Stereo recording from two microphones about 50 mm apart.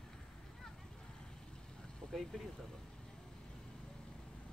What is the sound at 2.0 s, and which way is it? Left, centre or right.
Vehicle, centre.